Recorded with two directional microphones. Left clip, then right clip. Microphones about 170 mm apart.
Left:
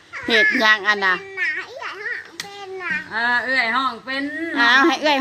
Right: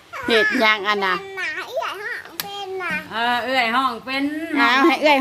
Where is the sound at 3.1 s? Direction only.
20° left (ahead or behind).